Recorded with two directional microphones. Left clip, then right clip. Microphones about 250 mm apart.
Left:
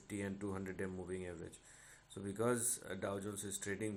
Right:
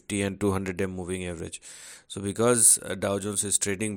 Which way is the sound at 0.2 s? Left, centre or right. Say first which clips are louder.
Right 17 dB; right.